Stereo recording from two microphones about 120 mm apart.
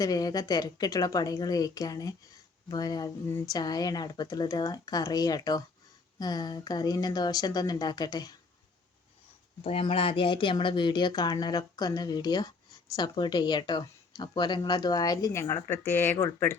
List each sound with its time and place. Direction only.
0.0 s speech: 30° left (ahead or behind)
9.6 s speech: 50° left (ahead or behind); by 15.8 s 20° left (ahead or behind)